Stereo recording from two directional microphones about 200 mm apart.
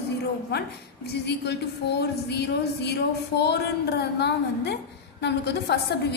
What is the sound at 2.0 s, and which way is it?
A woman's voice, 55° left (ahead or behind).